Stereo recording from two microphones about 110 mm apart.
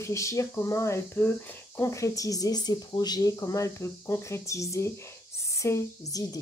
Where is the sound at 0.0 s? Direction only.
30° left (ahead or behind).